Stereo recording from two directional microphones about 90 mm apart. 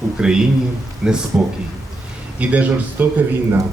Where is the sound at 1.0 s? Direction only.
10° right (ahead or behind).